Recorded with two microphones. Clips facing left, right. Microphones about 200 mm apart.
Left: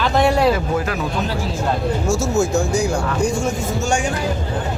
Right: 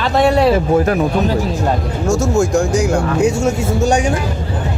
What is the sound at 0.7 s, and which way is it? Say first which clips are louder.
Speech: right 8 dB; 45° right (ahead or behind).